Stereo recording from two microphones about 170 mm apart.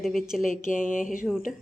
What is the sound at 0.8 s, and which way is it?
Speech, 50° left (ahead or behind).